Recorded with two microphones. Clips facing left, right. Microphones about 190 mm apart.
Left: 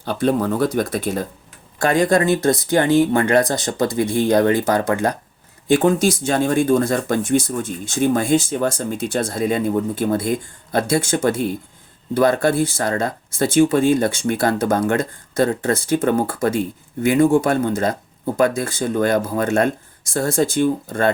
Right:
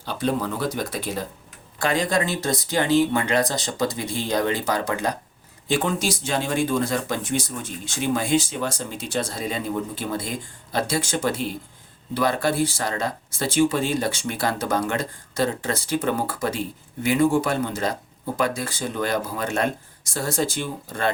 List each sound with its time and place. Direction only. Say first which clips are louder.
0.0 s speech: left 6 dB; 55° left (ahead or behind)